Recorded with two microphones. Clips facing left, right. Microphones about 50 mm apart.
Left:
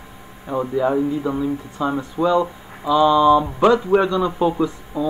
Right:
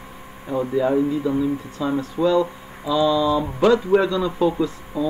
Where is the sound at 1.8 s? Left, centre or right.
Centre.